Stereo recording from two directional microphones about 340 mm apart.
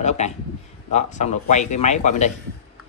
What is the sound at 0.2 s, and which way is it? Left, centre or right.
Speech, centre.